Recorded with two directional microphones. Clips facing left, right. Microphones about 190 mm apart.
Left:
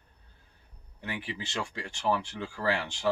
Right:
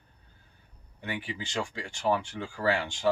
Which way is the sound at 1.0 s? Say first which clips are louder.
Right 1 dB; centre (ahead or behind).